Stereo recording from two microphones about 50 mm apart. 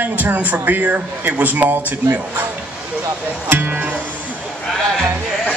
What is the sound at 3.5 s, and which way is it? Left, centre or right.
Speech, right.